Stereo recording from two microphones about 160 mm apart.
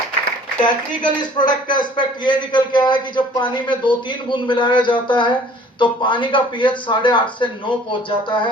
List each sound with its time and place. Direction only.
0.6 s a man's voice: 30° left (ahead or behind)